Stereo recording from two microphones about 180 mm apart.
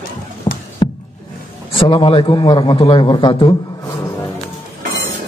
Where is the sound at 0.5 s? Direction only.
25° left (ahead or behind).